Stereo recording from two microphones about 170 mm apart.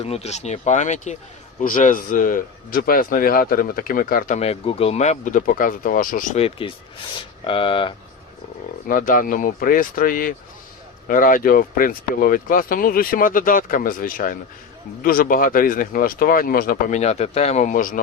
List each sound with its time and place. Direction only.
0.0 s speech: 40° left (ahead or behind); by 4.4 s 55° left (ahead or behind)
4.4 s speech: 35° left (ahead or behind); by 6.4 s 55° left (ahead or behind)
7.4 s speech: 30° left (ahead or behind)
8.9 s speech: 50° left (ahead or behind)